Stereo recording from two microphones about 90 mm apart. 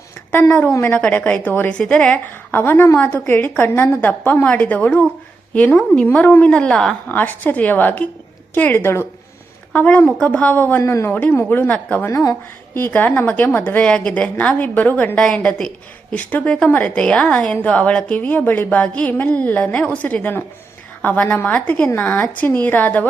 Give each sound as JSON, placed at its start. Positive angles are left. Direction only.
{"t": 0.7, "sound": "a woman's voice", "side_deg": 25}
{"t": 1.8, "sound": "a woman's voice", "side_deg": 10}
{"t": 7.1, "sound": "a woman's voice", "side_deg": 20}